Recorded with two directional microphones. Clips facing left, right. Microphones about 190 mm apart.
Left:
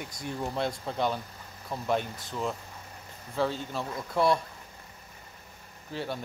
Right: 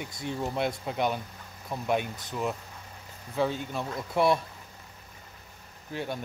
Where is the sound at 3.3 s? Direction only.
15° right (ahead or behind).